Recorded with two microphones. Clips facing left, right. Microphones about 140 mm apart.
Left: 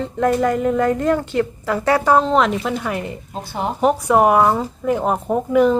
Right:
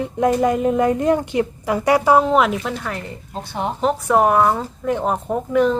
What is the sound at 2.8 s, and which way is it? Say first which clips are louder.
Speech: left 4 dB; 15° left (ahead or behind).